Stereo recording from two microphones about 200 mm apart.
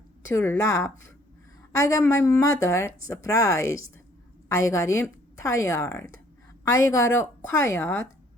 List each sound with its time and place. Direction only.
0.3 s a woman's voice: 10° left (ahead or behind)